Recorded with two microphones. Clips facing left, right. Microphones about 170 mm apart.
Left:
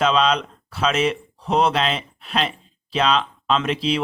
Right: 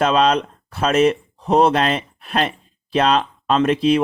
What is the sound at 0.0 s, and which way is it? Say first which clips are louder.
Speech: right 3 dB; 50° right (ahead or behind).